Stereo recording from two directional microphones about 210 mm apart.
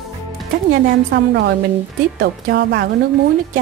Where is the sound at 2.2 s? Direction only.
50° right (ahead or behind).